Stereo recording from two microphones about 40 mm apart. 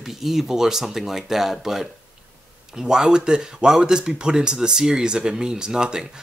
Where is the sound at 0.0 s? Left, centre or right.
Centre.